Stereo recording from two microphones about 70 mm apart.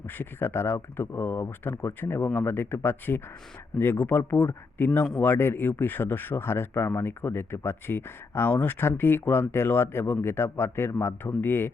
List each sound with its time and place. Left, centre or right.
0.1 s speech: left